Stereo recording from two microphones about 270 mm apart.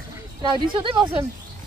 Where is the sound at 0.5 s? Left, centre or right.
Centre.